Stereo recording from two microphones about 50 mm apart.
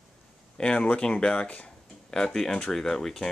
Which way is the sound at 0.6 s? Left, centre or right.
Left.